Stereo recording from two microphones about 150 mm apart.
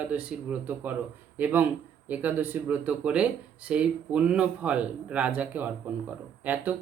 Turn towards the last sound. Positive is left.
turn(degrees=-10)  # may be behind; listen again after turning